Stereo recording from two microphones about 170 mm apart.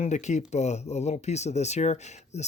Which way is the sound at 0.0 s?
45° left (ahead or behind).